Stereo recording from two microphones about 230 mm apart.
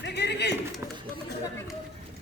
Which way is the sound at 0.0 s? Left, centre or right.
Left.